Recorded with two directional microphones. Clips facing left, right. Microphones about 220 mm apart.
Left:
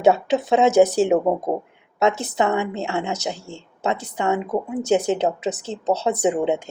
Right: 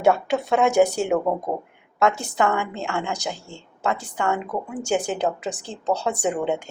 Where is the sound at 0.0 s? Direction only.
20° left (ahead or behind).